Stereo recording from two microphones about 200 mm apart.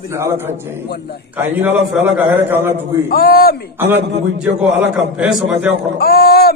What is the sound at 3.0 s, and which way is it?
Speech, 50° left (ahead or behind).